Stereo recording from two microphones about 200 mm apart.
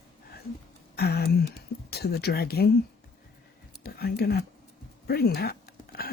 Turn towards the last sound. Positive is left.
turn(degrees=50)  # may be behind; listen again after turning